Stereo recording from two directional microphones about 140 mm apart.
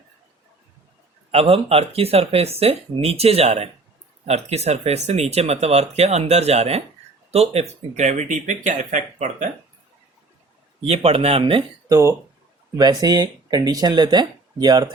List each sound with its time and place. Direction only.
1.3 s speech: 45° right (ahead or behind)
10.8 s speech: 45° right (ahead or behind)
11.9 s speech: 20° right (ahead or behind)